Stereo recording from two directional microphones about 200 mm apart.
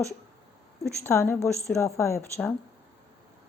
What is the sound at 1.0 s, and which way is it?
A woman's voice, 15° left (ahead or behind).